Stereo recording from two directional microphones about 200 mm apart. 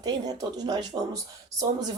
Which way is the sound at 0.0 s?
20° right (ahead or behind).